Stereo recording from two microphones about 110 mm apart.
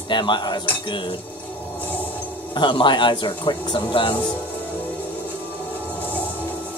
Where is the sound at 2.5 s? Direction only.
45° left (ahead or behind).